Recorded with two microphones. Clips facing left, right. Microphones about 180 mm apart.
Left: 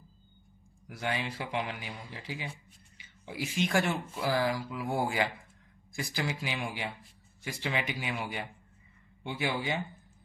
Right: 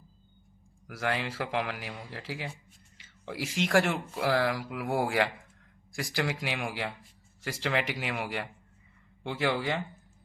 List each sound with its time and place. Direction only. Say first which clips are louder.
0.9 s speech: right 2 dB; 85° right